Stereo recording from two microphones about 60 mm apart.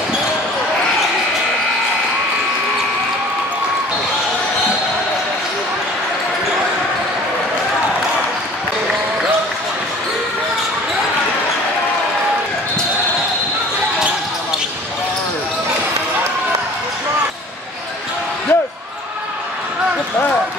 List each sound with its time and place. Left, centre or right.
18.5 s basketball bounce: left